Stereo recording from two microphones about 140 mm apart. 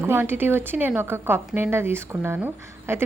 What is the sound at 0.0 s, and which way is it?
A woman's voice, 15° right (ahead or behind).